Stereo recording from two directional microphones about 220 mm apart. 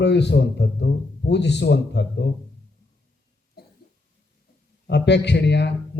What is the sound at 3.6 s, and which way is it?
Cough, 45° left (ahead or behind).